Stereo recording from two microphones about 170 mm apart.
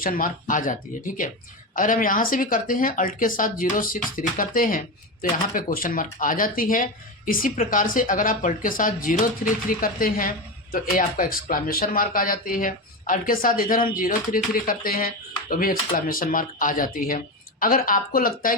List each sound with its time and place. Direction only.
0.0 s speech: 55° left (ahead or behind)